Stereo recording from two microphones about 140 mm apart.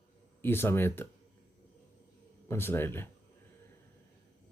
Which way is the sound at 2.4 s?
15° left (ahead or behind).